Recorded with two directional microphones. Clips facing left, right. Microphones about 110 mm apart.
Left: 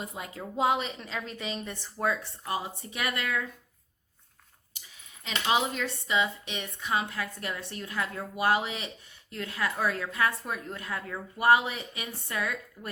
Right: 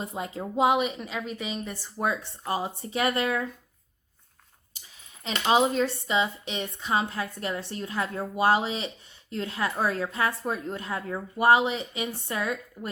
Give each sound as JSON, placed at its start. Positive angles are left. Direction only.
{"t": 0.0, "sound": "a woman's voice", "side_deg": -30}
{"t": 2.0, "sound": "speech", "side_deg": -30}
{"t": 5.2, "sound": "speech", "side_deg": -35}